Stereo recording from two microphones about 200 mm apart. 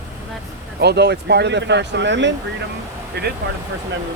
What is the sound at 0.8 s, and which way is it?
Speech, 55° right (ahead or behind).